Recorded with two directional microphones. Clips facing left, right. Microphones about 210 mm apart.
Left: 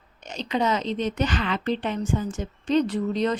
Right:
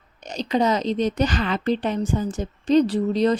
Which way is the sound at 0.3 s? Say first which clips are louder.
Right 4 dB; 40° right (ahead or behind).